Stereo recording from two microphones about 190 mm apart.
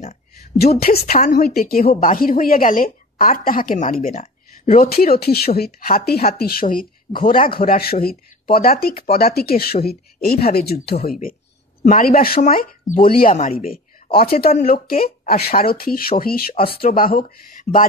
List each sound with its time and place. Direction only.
0.4 s a woman's voice: 55° left (ahead or behind)
17.7 s speech: 5° left (ahead or behind)